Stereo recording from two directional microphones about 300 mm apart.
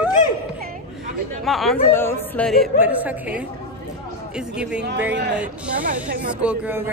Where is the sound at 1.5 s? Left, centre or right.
Centre.